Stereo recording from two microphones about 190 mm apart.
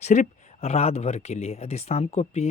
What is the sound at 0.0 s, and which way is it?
Speech, 35° left (ahead or behind).